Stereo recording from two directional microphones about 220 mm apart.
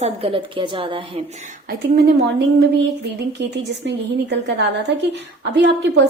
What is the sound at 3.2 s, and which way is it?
A woman's voice, 50° right (ahead or behind).